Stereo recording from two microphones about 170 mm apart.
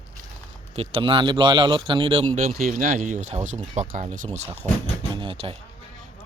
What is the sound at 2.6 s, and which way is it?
Speech, 50° right (ahead or behind).